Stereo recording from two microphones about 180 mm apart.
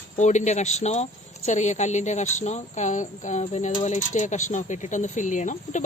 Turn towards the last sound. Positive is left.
turn(degrees=45)  # may be behind; listen again after turning